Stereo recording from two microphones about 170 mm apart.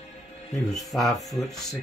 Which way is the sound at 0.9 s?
Centre (ahead or behind).